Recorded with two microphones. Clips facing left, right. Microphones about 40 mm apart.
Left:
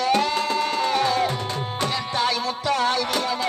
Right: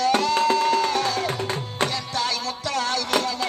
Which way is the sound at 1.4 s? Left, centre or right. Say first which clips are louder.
Right 1 dB; right.